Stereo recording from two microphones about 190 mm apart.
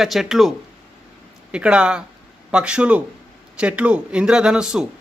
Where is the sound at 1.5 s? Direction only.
5° right (ahead or behind).